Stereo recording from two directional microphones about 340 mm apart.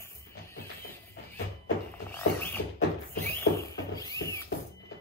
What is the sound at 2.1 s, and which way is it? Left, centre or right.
Music, centre.